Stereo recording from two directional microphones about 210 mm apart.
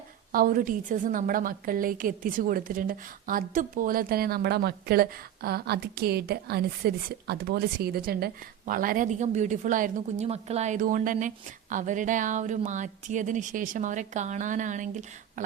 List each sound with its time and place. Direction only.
0.3 s a woman's voice: 40° right (ahead or behind)